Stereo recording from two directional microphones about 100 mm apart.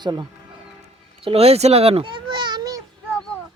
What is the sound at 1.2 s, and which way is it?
Speech, 80° right.